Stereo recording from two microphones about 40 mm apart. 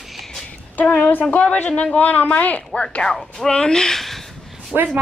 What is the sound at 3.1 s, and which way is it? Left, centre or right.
Speech, centre.